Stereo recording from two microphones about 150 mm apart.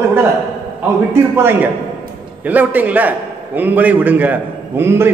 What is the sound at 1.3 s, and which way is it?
A man's voice, 15° right (ahead or behind).